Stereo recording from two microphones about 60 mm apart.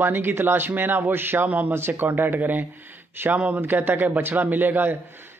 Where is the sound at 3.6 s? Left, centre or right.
Right.